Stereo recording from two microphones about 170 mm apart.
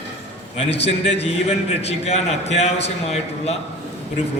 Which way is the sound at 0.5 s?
35° left (ahead or behind).